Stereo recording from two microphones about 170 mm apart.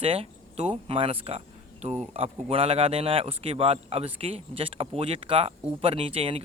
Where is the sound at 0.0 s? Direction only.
35° right (ahead or behind).